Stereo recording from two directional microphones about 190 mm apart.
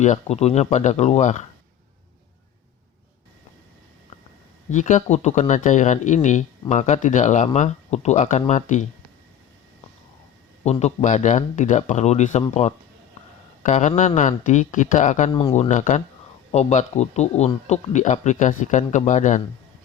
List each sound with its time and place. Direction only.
0.0 s speech: 35° left (ahead or behind)
4.7 s speech: 40° left (ahead or behind)
10.6 s speech: 35° left (ahead or behind)
15.3 s speech: 30° left (ahead or behind)